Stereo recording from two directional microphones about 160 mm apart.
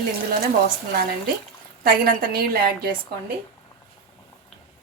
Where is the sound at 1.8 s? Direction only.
65° right (ahead or behind).